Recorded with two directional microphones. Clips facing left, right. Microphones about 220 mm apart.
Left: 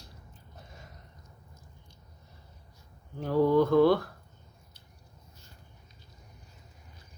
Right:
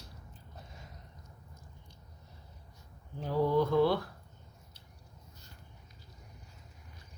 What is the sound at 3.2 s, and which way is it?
Mantra, 55° left (ahead or behind).